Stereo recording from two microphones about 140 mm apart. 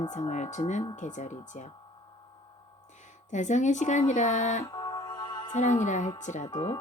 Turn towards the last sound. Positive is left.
turn(degrees=30)  # may be behind; listen again after turning